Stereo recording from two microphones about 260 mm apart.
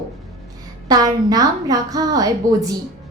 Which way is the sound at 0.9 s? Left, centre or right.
Centre.